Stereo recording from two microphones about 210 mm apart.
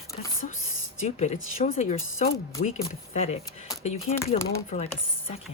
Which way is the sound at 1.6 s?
35° left (ahead or behind).